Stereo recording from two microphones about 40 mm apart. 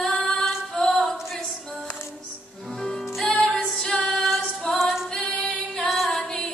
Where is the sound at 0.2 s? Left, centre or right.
Centre.